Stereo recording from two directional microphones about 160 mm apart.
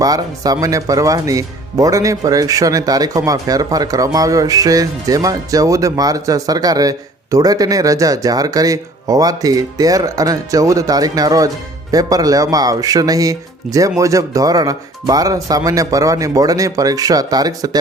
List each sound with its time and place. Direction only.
0.0 s speech: 25° right (ahead or behind)